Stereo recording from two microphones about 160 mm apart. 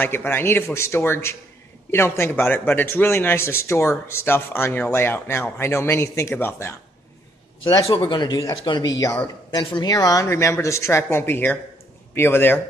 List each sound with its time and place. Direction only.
0.0 s a man's voice: 15° left (ahead or behind)
7.6 s a man's voice: 30° left (ahead or behind); by 12.5 s 15° left (ahead or behind)